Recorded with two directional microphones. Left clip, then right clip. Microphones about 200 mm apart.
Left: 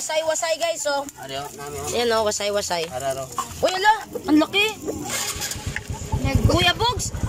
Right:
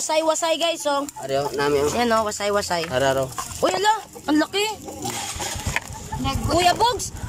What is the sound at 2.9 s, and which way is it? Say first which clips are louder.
Speech: right 6 dB; 45° right (ahead or behind).